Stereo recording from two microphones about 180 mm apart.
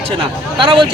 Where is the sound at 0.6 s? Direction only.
30° right (ahead or behind).